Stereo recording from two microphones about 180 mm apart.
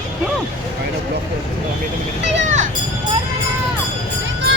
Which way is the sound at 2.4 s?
40° right (ahead or behind).